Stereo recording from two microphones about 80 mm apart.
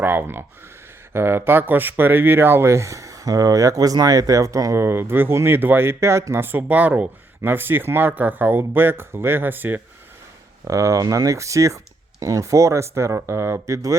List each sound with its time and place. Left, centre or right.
0.0 s speech: right
10.7 s speech: right